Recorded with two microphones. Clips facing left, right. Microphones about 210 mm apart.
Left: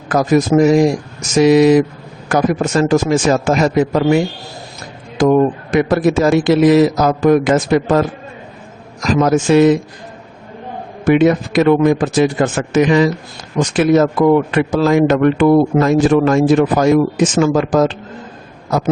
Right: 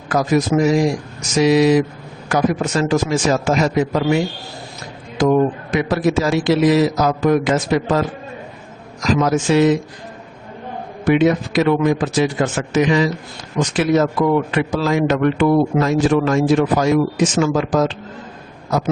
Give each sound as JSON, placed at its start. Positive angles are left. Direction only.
{"t": 0.1, "sound": "a man's voice", "side_deg": 50}
{"t": 5.7, "sound": "a man's voice", "side_deg": 50}
{"t": 9.2, "sound": "a man's voice", "side_deg": 55}
{"t": 11.0, "sound": "a man's voice", "side_deg": 50}